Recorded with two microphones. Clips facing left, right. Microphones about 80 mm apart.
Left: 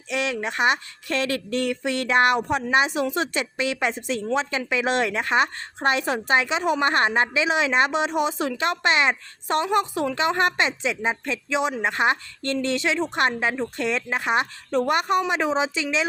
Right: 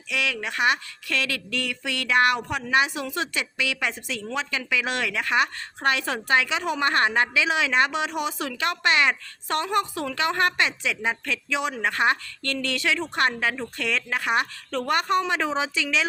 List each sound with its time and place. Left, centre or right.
0.1 s speech: left